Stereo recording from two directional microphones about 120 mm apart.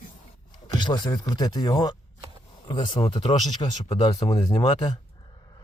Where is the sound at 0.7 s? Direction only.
35° left (ahead or behind).